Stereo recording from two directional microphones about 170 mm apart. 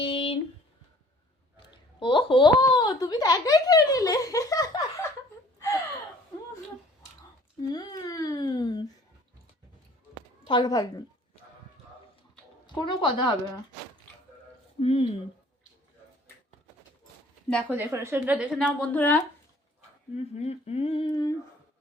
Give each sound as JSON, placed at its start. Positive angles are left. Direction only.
{"t": 0.0, "sound": "a sound", "side_deg": 35}
{"t": 1.5, "sound": "speech", "side_deg": 30}
{"t": 7.6, "sound": "speech", "side_deg": 25}
{"t": 10.4, "sound": "speech", "side_deg": 25}
{"t": 12.6, "sound": "speech", "side_deg": 25}
{"t": 14.8, "sound": "speech", "side_deg": 35}
{"t": 17.7, "sound": "a woman's voice", "side_deg": -15}
{"t": 18.5, "sound": "a woman's voice", "side_deg": 10}
{"t": 20.1, "sound": "speech", "side_deg": 40}